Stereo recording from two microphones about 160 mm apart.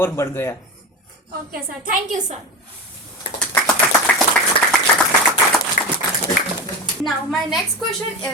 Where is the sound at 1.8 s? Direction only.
55° right (ahead or behind).